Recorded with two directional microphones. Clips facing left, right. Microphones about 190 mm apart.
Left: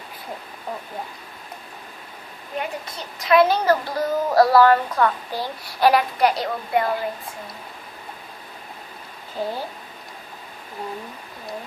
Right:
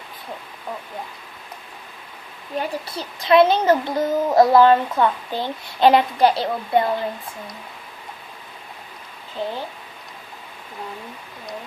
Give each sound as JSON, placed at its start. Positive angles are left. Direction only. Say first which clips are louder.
{"t": 2.6, "sound": "a child's voice", "louder": "right 3 dB", "side_deg": -30}
{"t": 9.4, "sound": "speech", "louder": "even", "side_deg": 10}